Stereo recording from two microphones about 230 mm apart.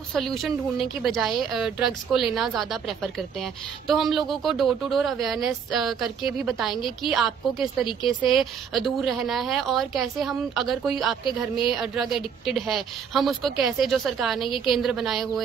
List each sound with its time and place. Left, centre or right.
0.1 s a woman's voice: centre
11.2 s a woman's voice: left
11.7 s a woman's voice: centre